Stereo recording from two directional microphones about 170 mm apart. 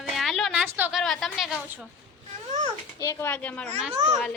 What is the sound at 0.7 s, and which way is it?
A woman's voice, 10° right (ahead or behind).